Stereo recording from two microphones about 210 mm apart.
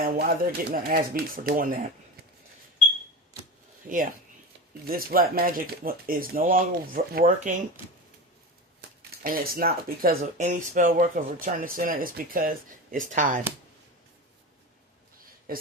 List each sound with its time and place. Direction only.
0.0 s speech: 45° right (ahead or behind)
3.8 s speech: 40° right (ahead or behind)
9.2 s speech: 45° right (ahead or behind)
15.5 s speech: 45° right (ahead or behind)